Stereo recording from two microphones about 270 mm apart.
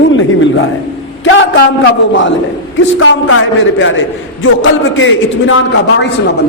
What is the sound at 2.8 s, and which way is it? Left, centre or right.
A man's voice, left.